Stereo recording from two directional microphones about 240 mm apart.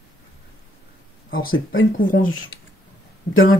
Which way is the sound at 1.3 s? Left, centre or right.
Left.